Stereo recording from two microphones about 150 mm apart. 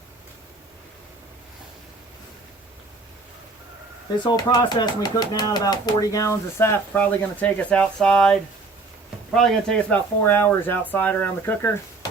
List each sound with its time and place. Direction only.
4.3 s speech: 30° left (ahead or behind)